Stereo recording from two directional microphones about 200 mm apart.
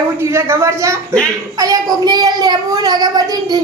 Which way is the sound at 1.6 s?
20° right (ahead or behind).